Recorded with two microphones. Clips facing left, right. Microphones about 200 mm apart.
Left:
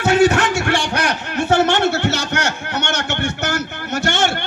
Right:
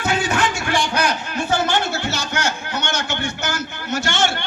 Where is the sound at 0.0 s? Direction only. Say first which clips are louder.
Left 7 dB; 80° left.